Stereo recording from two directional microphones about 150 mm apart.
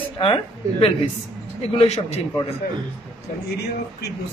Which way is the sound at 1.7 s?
45° left (ahead or behind).